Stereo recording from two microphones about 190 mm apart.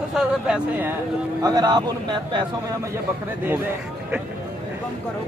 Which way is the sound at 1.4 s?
20° right (ahead or behind).